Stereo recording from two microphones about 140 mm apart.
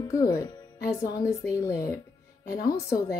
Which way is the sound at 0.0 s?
25° left (ahead or behind).